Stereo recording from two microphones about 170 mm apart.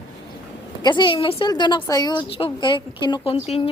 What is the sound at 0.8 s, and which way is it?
A woman's voice, 25° left (ahead or behind).